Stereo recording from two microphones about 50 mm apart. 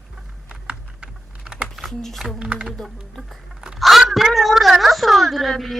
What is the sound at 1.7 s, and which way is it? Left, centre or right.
Speech, centre.